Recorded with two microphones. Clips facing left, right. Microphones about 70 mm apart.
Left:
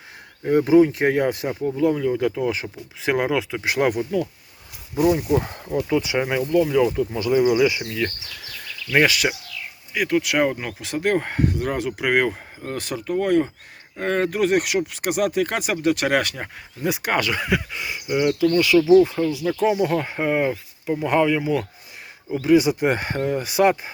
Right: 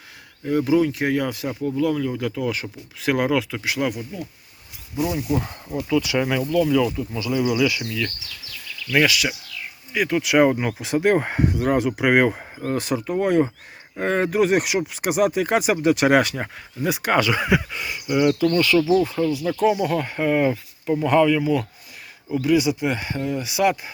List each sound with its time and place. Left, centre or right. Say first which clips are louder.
0.4 s speech: left 4 dB; left
3.6 s speech: left 4 dB; left
6.9 s speech: left 5 dB; left
9.0 s speech: left 1 dB; left
9.9 s speech: right 1 dB; centre
18.9 s speech: left 4 dB; left
22.4 s speech: left 3 dB; left